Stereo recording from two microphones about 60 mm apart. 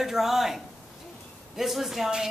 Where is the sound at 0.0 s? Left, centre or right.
Centre.